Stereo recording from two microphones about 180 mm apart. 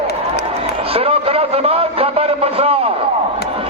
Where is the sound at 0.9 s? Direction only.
35° right (ahead or behind).